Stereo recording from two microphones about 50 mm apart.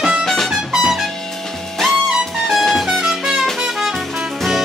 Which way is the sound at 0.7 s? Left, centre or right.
Centre.